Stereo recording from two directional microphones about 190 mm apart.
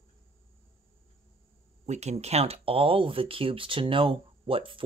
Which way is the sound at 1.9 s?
35° right (ahead or behind).